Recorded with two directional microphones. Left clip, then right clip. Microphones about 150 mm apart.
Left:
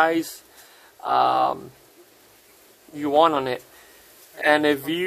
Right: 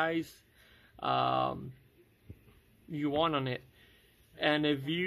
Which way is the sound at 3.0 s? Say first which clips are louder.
Left 13 dB; 15° left (ahead or behind).